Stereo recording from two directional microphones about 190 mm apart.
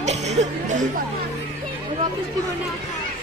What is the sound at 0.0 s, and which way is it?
Music, 40° right (ahead or behind).